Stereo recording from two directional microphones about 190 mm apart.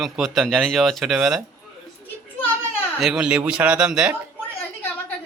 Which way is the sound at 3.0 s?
5° right (ahead or behind).